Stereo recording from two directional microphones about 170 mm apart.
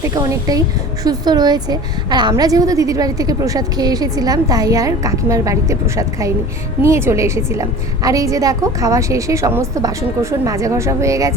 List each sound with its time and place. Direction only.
0.0 s a woman's voice: 20° right (ahead or behind)